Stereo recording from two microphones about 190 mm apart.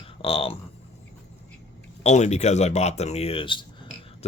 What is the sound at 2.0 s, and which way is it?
Speech, 35° left (ahead or behind).